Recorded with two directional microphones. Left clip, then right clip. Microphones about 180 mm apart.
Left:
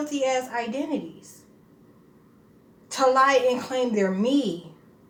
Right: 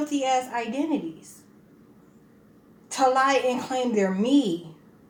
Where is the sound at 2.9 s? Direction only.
10° left (ahead or behind).